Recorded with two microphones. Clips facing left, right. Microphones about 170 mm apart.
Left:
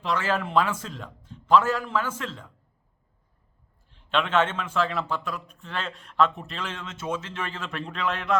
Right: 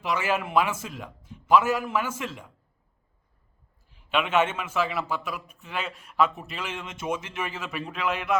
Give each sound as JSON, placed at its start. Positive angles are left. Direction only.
{"t": 0.0, "sound": "a man's voice", "side_deg": -10}
{"t": 3.8, "sound": "a man's voice", "side_deg": -10}